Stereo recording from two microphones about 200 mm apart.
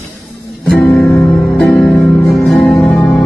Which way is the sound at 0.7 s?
5° left (ahead or behind).